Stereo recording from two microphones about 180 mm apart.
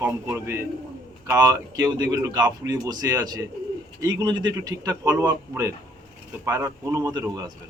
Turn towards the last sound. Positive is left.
turn(degrees=-20)  # may be behind; listen again after turning